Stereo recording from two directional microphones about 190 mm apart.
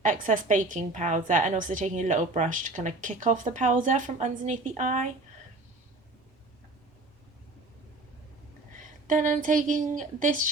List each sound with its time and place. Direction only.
0.0 s a woman's voice: 45° right (ahead or behind)
9.0 s a woman's voice: 40° right (ahead or behind)